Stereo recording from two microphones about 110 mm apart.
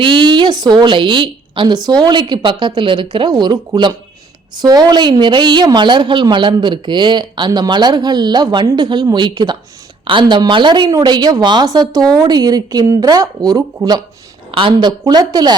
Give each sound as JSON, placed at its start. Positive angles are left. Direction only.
{"t": 0.0, "sound": "a woman's voice", "side_deg": -45}
{"t": 14.5, "sound": "a woman's voice", "side_deg": -50}